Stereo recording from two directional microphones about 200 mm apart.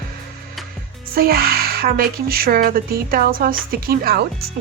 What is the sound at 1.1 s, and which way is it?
Speech, 50° right (ahead or behind).